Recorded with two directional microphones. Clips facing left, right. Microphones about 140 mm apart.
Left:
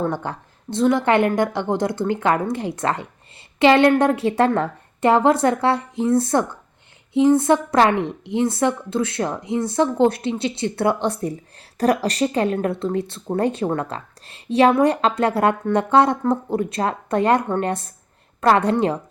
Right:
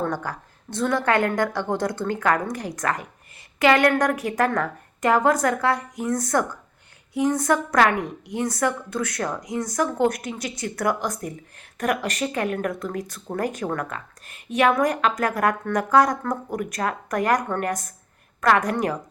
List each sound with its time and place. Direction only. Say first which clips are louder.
0.0 s speech: left 3 dB; 20° left (ahead or behind)